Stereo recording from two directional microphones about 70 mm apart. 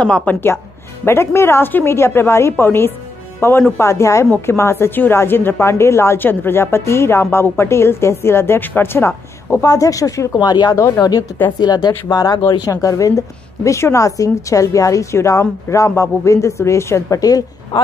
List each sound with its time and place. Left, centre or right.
0.0 s speech: centre
1.0 s a woman's voice: left
9.6 s speech: left
10.4 s speech: left
10.8 s speech: left
11.6 s speech: left
12.6 s a woman's voice: left